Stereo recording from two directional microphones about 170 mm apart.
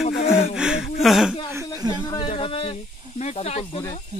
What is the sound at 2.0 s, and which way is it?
Snake, 30° left (ahead or behind).